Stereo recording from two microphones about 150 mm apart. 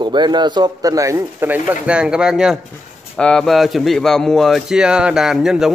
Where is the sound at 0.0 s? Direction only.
30° right (ahead or behind).